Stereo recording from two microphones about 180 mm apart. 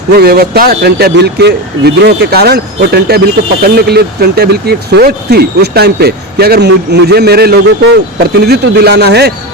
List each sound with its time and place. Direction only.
0.1 s speech: 60° right (ahead or behind)